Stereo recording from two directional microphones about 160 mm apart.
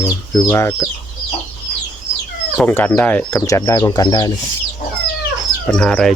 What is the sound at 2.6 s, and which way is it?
Speech, 10° left (ahead or behind).